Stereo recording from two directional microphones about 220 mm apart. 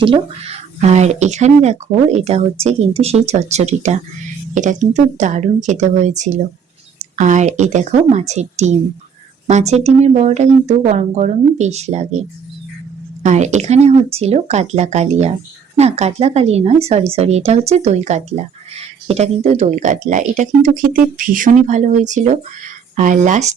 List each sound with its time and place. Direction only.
0.0 s speech: 25° right (ahead or behind)
13.2 s speech: 30° right (ahead or behind)